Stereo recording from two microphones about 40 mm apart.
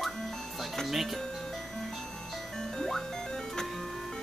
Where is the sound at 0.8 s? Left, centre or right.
Centre.